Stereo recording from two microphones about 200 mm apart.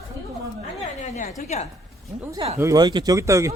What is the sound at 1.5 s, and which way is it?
Speech, 35° left (ahead or behind).